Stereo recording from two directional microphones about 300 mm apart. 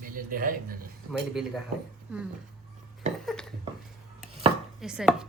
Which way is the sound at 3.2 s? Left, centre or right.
Centre.